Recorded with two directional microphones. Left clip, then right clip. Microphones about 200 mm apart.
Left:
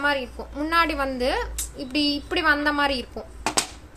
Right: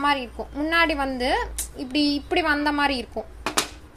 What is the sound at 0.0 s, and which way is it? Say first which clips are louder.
A woman's voice: right 1 dB; 10° right (ahead or behind).